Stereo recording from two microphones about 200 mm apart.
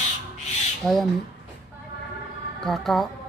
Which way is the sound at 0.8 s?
Centre (ahead or behind).